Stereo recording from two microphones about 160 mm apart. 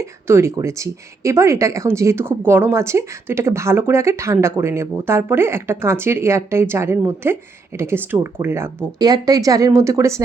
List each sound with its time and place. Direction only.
0.0 s speech: 15° right (ahead or behind)